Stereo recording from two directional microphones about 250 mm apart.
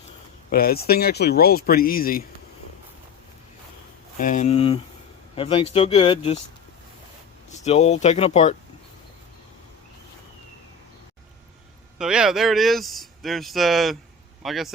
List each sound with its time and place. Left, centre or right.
0.5 s speech: left
4.2 s speech: left
7.6 s speech: left
11.9 s speech: centre